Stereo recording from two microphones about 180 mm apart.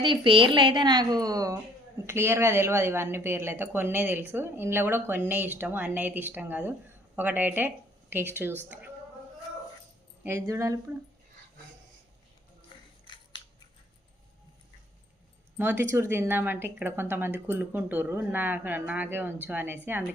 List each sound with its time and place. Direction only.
0.0 s a woman's voice: 30° right (ahead or behind); by 8.9 s 10° right (ahead or behind)
10.2 s speech: 15° right (ahead or behind)
12.7 s a sound: 25° left (ahead or behind)
15.5 s speech: 10° right (ahead or behind)